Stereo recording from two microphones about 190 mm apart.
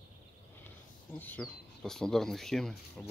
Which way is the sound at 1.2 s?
10° left (ahead or behind).